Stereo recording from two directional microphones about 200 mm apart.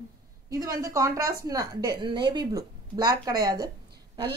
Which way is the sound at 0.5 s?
15° right (ahead or behind).